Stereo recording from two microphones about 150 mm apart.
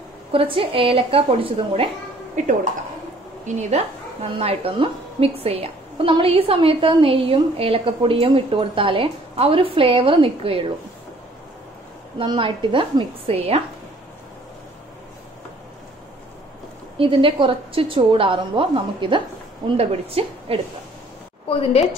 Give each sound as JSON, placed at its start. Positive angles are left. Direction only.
{"t": 0.3, "sound": "a woman's voice", "side_deg": -35}
{"t": 2.3, "sound": "a woman's voice", "side_deg": -55}
{"t": 12.2, "sound": "a woman's voice", "side_deg": -35}
{"t": 17.0, "sound": "a woman's voice", "side_deg": -35}
{"t": 21.5, "sound": "a woman's voice", "side_deg": 40}